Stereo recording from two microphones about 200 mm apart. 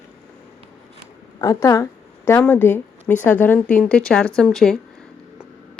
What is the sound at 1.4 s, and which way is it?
Speech, 15° left (ahead or behind).